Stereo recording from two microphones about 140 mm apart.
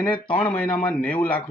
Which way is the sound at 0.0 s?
10° left (ahead or behind).